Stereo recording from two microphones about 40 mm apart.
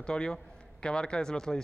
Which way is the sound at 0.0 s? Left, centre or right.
Left.